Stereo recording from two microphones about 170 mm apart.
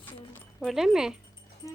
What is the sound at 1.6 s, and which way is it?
Speech, 20° left (ahead or behind).